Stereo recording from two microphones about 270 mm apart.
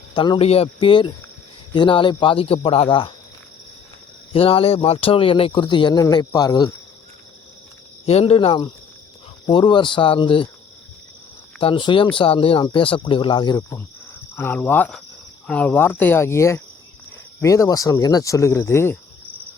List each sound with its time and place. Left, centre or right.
0.1 s speech: centre
4.3 s speech: left
8.0 s speech: left
11.6 s speech: centre